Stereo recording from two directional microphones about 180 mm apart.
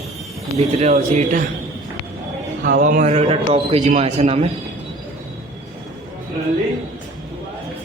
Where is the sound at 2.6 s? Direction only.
50° right (ahead or behind).